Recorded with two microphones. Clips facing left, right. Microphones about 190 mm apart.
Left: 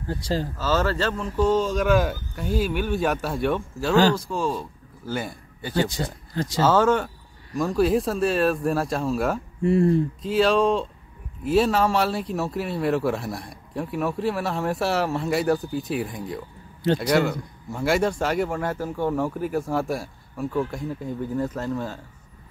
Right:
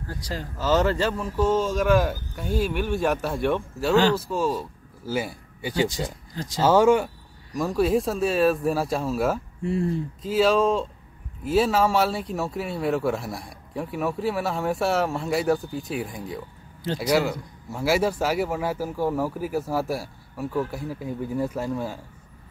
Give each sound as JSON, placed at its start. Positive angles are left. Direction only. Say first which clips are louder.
{"t": 0.1, "sound": "speech", "louder": "left 8 dB", "side_deg": 30}
{"t": 0.6, "sound": "speech", "louder": "right 4 dB", "side_deg": -20}
{"t": 7.5, "sound": "speech", "louder": "left 1 dB", "side_deg": 0}
{"t": 9.6, "sound": "speech", "louder": "left 10 dB", "side_deg": 65}
{"t": 10.2, "sound": "speech", "louder": "right 1 dB", "side_deg": 0}
{"t": 16.8, "sound": "a man's voice", "louder": "left 6 dB", "side_deg": 65}
{"t": 17.1, "sound": "speech", "louder": "left 1 dB", "side_deg": -5}